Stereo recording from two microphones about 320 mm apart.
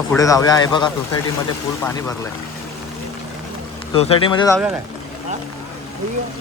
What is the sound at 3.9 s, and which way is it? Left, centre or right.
Speech, centre.